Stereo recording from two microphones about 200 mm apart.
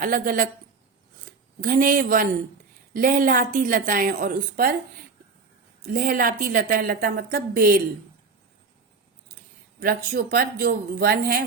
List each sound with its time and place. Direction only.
0.0 s a woman's voice: 45° right (ahead or behind)
1.6 s a woman's voice: 45° right (ahead or behind)
5.8 s a woman's voice: 45° right (ahead or behind)
9.8 s a woman's voice: 50° right (ahead or behind)